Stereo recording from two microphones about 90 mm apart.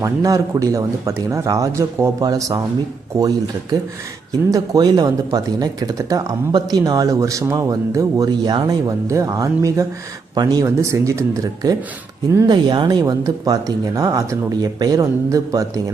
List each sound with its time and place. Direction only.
0.0 s speech: 35° right (ahead or behind); by 8.7 s 55° right (ahead or behind)
9.0 s speech: 35° right (ahead or behind)
12.5 s speech: 55° right (ahead or behind)